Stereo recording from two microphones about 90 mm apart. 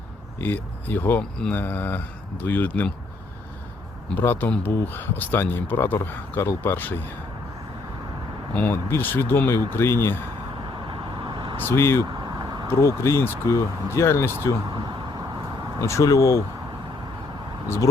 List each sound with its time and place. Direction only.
0.3 s speech: 20° left (ahead or behind)
4.1 s speech: 20° left (ahead or behind)
8.5 s speech: 20° left (ahead or behind)
10.8 s vehicle: 60° right (ahead or behind)
11.5 s speech: 25° left (ahead or behind)
15.8 s speech: 35° left (ahead or behind)